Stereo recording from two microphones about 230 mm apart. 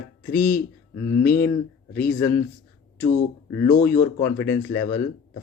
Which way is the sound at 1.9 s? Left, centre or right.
Centre.